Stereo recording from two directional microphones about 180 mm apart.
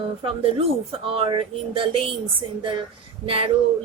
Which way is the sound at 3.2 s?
30° right (ahead or behind).